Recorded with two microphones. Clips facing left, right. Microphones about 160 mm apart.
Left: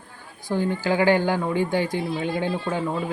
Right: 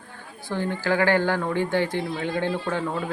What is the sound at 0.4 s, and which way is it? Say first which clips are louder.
Speech: left 2 dB; 15° left (ahead or behind).